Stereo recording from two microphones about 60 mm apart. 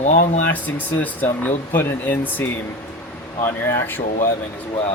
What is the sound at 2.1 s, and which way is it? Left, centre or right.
Speech, left.